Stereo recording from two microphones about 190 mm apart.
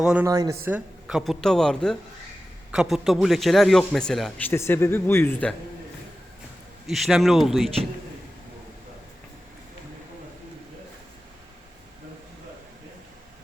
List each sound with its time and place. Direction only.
0.0 s a man's voice: 5° right (ahead or behind)
0.3 s speech: 20° right (ahead or behind)
0.6 s a man's voice: 5° right (ahead or behind); by 5.5 s 10° left (ahead or behind)
6.8 s a man's voice: centre (ahead or behind)